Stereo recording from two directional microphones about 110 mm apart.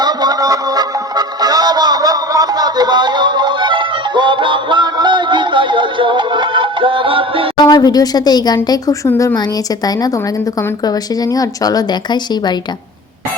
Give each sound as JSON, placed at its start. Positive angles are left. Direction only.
{"t": 0.0, "sound": "music", "side_deg": -35}
{"t": 7.5, "sound": "a woman's voice", "side_deg": 40}